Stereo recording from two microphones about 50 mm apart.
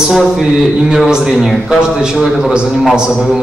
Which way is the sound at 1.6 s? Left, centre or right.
Centre.